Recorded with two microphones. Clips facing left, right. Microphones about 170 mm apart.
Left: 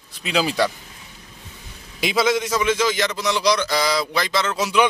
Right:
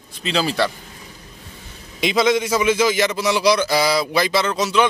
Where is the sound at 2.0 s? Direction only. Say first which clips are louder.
Right 2 dB; 5° left (ahead or behind).